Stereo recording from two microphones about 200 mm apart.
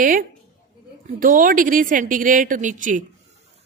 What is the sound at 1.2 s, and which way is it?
A woman's voice, 45° right (ahead or behind).